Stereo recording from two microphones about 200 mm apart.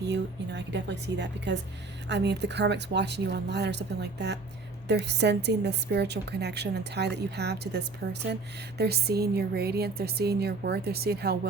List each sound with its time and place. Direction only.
0.0 s a woman's voice: 60° right (ahead or behind)